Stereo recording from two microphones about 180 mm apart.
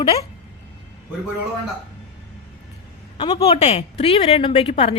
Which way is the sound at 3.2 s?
25° left (ahead or behind).